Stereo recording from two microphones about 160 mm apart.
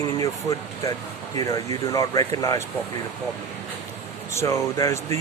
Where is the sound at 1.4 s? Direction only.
20° left (ahead or behind).